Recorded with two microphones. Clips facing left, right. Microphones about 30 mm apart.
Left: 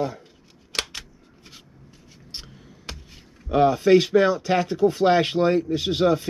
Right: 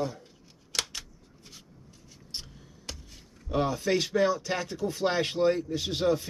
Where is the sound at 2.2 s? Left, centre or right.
Left.